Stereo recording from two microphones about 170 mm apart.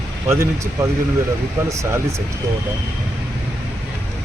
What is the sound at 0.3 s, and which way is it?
Speech, 15° right (ahead or behind).